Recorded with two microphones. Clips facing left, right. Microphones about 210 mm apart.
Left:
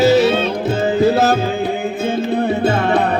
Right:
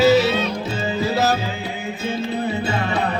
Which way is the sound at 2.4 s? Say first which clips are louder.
Left 7 dB; 55° left (ahead or behind).